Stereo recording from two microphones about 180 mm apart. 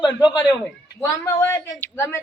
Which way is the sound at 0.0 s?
25° left (ahead or behind).